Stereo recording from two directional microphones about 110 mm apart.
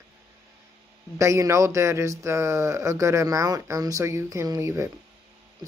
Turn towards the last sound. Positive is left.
turn(degrees=-25)  # may be behind; listen again after turning